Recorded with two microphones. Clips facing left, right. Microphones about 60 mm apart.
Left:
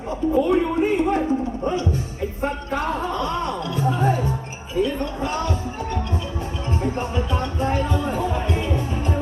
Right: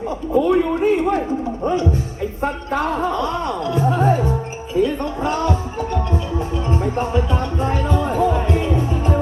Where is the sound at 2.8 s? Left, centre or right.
Right.